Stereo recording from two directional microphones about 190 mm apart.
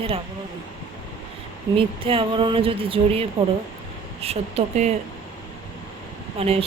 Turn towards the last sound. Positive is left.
turn(degrees=-30)  # may be behind; listen again after turning